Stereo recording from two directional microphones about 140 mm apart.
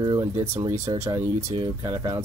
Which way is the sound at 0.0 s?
30° right (ahead or behind).